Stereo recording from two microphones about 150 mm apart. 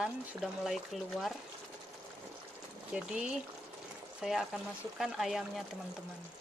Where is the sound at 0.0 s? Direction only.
Centre (ahead or behind).